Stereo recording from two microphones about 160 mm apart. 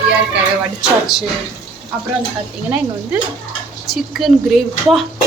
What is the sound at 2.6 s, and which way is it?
Speech, 10° right (ahead or behind).